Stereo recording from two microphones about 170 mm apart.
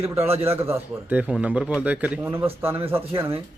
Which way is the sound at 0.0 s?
15° right (ahead or behind).